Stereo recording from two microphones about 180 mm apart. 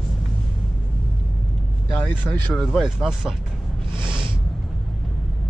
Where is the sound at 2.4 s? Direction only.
Centre (ahead or behind).